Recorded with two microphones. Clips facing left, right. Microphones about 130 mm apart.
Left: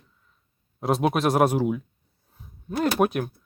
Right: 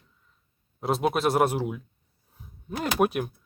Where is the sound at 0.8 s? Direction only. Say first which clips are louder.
Left 2 dB; centre (ahead or behind).